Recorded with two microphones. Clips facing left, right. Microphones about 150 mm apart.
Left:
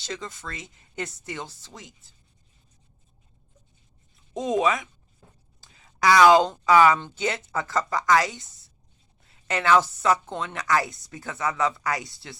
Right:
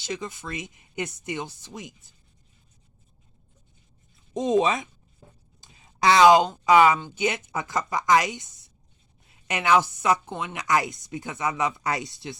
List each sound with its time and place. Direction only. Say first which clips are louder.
0.0 s speech: right 2 dB; 10° right (ahead or behind)
4.4 s speech: right 2 dB; 25° right (ahead or behind)
5.5 s a sound: right 1 dB; 20° right (ahead or behind)
6.7 s speech: right 1 dB; 20° right (ahead or behind)